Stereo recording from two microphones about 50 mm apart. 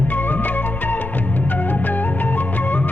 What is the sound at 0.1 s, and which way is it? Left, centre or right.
Music, left.